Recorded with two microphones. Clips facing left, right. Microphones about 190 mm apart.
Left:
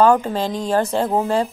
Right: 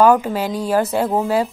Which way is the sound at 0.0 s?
10° right (ahead or behind).